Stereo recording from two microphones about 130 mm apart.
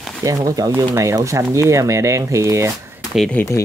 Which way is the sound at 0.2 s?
30° right (ahead or behind).